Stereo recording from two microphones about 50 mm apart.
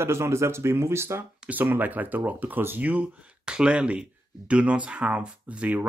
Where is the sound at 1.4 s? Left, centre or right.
Right.